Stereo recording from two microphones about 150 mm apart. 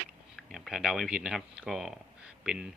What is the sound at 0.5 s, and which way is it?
Speech, centre (ahead or behind).